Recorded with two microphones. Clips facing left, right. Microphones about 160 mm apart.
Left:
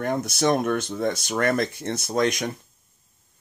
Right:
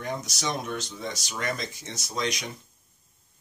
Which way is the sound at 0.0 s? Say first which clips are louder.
Left 9 dB; 55° left (ahead or behind).